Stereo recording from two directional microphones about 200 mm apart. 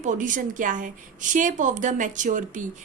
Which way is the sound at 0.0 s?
40° right (ahead or behind).